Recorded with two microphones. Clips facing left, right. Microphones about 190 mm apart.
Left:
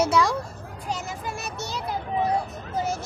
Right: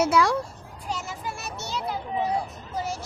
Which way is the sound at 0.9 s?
15° left (ahead or behind).